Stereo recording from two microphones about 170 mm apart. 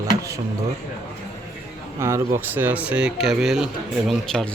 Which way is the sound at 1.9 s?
15° right (ahead or behind).